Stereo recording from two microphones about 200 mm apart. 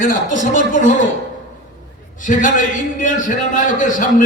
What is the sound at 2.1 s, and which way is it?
A man's voice, 40° left (ahead or behind).